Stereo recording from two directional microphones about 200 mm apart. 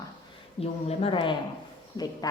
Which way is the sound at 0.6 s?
30° left (ahead or behind).